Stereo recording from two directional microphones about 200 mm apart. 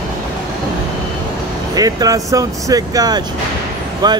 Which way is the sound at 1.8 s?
20° right (ahead or behind).